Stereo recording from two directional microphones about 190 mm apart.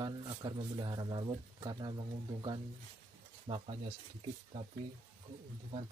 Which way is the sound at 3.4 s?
30° right (ahead or behind).